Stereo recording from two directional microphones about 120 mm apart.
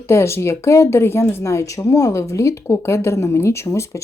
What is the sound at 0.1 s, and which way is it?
Speech, 20° left (ahead or behind).